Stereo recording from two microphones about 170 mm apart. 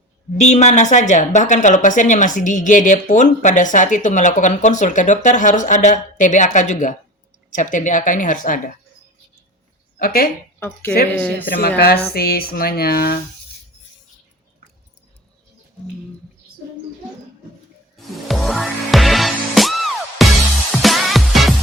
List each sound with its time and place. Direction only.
0.3 s a woman's voice: 40° left (ahead or behind)
10.0 s speech: 60° left (ahead or behind)
11.1 s speech: 10° left (ahead or behind)
11.4 s speech: 60° left (ahead or behind)
17.9 s music: centre (ahead or behind)